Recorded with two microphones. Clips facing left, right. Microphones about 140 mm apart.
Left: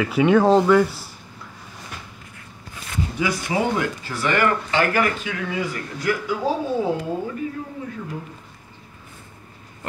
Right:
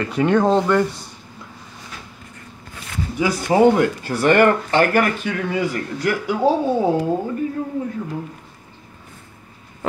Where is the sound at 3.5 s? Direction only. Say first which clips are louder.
Right 11 dB; 50° right (ahead or behind).